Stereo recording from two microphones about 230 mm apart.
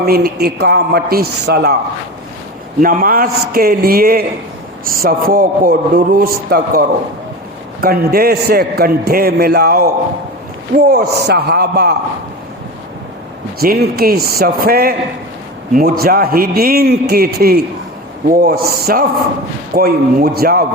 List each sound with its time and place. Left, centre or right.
0.0 s a man's voice: right
2.8 s a man's voice: right
13.6 s a man's voice: right